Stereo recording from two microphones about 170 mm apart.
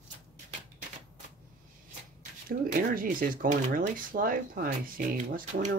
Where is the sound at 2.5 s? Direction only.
55° right (ahead or behind).